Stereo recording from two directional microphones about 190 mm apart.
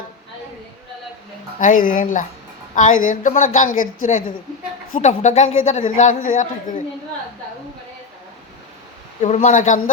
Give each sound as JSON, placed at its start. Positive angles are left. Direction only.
{"t": 1.5, "sound": "a woman's voice", "side_deg": 45}
{"t": 9.2, "sound": "a woman's voice", "side_deg": 40}